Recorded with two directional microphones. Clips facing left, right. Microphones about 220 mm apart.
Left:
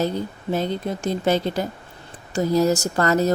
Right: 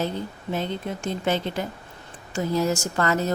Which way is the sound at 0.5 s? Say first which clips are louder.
Left 4 dB; 40° left (ahead or behind).